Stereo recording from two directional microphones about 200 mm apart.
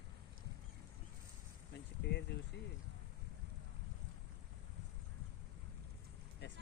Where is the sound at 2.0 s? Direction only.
65° left (ahead or behind).